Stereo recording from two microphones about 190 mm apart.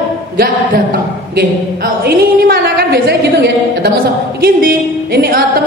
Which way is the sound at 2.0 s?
50° right (ahead or behind).